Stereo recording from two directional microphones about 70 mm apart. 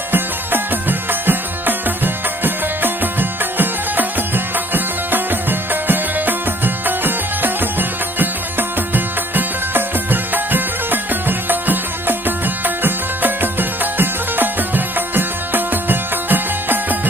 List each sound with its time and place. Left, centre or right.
0.1 s music: right